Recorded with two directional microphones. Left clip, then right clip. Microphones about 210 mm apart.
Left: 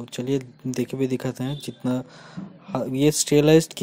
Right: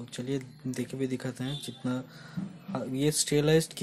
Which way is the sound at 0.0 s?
30° left (ahead or behind).